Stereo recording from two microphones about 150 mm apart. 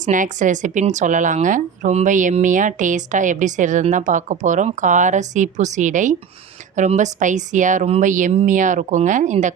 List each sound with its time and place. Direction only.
0.0 s speech: 55° right (ahead or behind)